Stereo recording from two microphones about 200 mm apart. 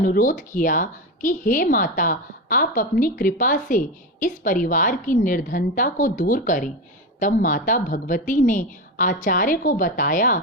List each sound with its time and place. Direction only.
0.0 s a woman's voice: 45° left (ahead or behind)